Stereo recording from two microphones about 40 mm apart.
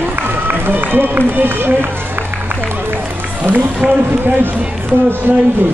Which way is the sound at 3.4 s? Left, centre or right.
Right.